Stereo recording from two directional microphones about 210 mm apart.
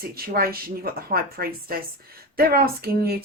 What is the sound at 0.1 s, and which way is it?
Speech, 45° right (ahead or behind).